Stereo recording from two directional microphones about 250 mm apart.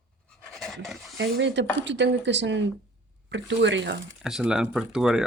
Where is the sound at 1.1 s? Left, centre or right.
Right.